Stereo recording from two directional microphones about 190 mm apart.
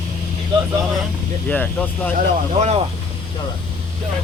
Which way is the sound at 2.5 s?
35° right (ahead or behind).